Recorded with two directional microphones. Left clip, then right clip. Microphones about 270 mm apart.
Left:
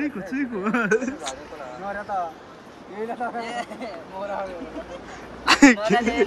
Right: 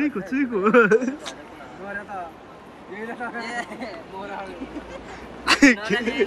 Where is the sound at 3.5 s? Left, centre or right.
Centre.